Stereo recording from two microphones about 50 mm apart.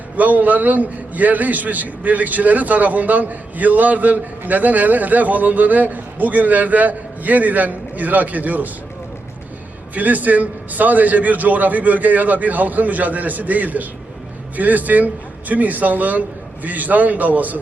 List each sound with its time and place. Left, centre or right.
0.2 s a man's voice: right
9.9 s a man's voice: right